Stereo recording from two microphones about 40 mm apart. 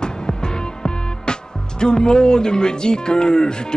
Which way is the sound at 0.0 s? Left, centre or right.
Centre.